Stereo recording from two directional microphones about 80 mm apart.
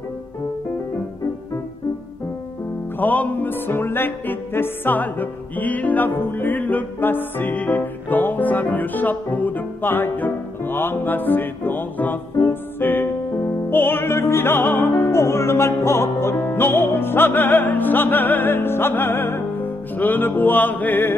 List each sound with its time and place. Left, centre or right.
3.0 s music: centre